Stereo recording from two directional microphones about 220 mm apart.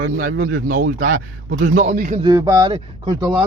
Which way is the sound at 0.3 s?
65° right (ahead or behind).